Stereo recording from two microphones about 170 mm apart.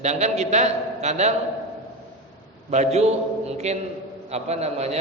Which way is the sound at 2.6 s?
40° right (ahead or behind).